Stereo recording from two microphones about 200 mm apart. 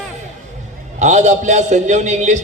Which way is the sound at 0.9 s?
35° right (ahead or behind).